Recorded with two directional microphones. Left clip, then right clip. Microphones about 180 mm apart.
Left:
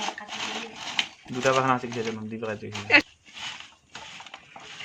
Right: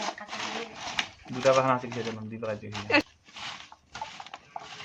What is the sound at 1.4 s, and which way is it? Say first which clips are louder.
Speech: even; 50° left (ahead or behind).